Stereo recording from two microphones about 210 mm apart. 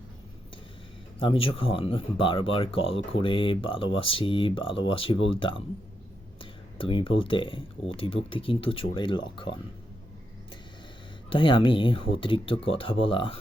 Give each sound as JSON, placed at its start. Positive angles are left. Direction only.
{"t": 1.2, "sound": "speech", "side_deg": 25}
{"t": 6.4, "sound": "a sound", "side_deg": 25}
{"t": 7.3, "sound": "speech", "side_deg": 25}
{"t": 11.3, "sound": "speech", "side_deg": 25}